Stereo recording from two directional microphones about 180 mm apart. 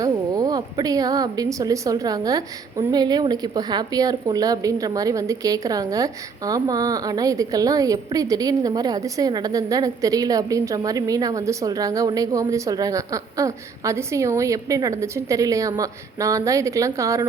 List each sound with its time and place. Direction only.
0.0 s a woman's voice: 20° right (ahead or behind)